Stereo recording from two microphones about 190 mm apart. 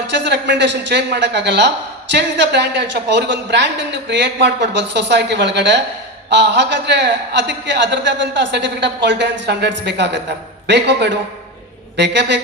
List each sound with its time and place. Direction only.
0.1 s a man's voice: 65° right (ahead or behind)